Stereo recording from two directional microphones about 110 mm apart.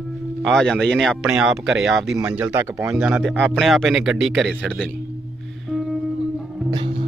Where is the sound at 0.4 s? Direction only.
5° left (ahead or behind).